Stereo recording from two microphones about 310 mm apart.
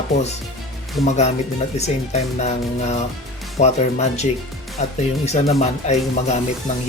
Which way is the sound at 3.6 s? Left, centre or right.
Left.